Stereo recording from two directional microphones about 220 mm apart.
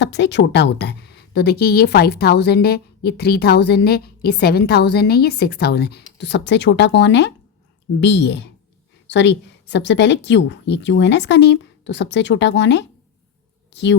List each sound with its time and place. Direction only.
0.0 s speech: 55° left (ahead or behind)